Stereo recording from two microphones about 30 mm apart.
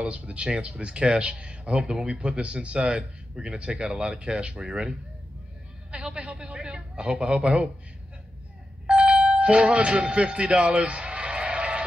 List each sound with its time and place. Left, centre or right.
0.2 s speech: right
1.8 s speech: right
2.0 s speech: right
3.0 s speech: right
4.6 s speech: right
5.9 s music: right
6.3 s speech: right
8.8 s doorbell: right
9.2 s music: right